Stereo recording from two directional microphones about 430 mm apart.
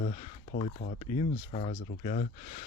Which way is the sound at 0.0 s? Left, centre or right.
Centre.